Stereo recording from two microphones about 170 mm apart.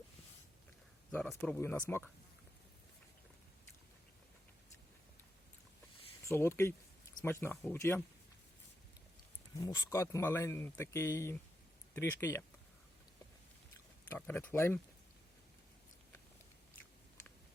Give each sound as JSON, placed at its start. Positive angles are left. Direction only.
{"t": 1.1, "sound": "speech", "side_deg": 5}
{"t": 6.2, "sound": "speech", "side_deg": 15}
{"t": 9.6, "sound": "speech", "side_deg": 20}
{"t": 14.2, "sound": "speech", "side_deg": 10}